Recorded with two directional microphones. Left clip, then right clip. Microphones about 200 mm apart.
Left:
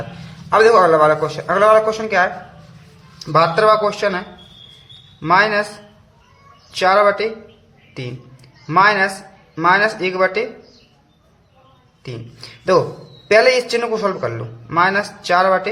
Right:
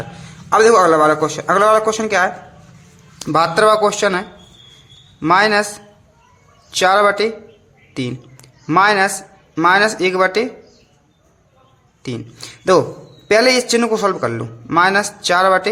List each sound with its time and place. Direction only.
0.5 s a man's voice: 25° right (ahead or behind)
6.7 s a man's voice: 30° right (ahead or behind)
12.0 s a man's voice: 25° right (ahead or behind)